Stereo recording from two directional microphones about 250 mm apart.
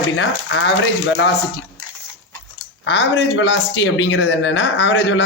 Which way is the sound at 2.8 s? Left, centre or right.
Left.